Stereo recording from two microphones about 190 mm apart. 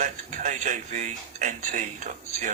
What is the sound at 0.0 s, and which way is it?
Speech, 40° right (ahead or behind).